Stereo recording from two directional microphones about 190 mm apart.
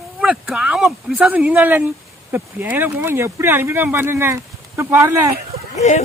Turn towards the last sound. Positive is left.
turn(degrees=35)  # may be behind; listen again after turning